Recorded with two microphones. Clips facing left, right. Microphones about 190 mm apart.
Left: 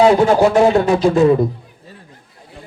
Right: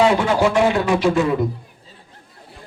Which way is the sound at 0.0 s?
35° left (ahead or behind).